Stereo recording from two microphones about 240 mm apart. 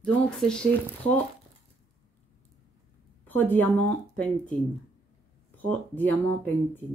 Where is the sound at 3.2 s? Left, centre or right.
Centre.